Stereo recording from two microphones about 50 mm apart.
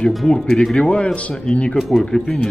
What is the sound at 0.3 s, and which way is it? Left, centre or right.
Speech, centre.